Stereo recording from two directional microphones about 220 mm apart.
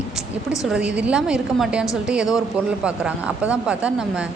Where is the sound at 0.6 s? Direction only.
5° right (ahead or behind).